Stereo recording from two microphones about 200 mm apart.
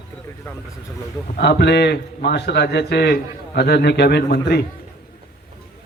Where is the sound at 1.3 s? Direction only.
55° left (ahead or behind).